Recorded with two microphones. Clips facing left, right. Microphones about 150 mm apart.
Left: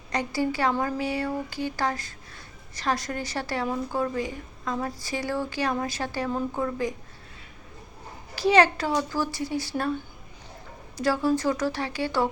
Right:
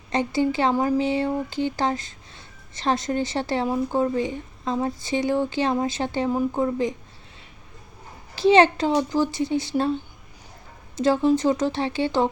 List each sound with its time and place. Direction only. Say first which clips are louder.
0.1 s speech: right 4 dB; 25° right (ahead or behind)
8.4 s speech: right 4 dB; 25° right (ahead or behind)